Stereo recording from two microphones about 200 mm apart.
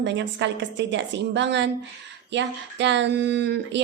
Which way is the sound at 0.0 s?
60° right (ahead or behind).